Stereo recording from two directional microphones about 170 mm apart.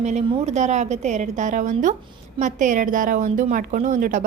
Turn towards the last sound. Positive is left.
turn(degrees=-50)  # may be behind; listen again after turning